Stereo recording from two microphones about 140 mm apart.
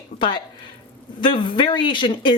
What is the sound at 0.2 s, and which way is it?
Speech, 35° left (ahead or behind).